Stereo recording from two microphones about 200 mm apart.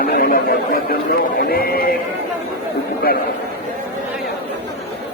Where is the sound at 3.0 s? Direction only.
50° left (ahead or behind).